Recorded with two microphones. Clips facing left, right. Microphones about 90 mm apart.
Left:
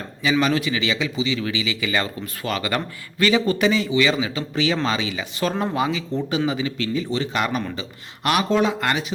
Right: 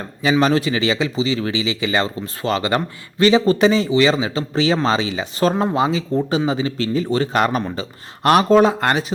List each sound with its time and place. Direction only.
0.2 s speech: 35° right (ahead or behind)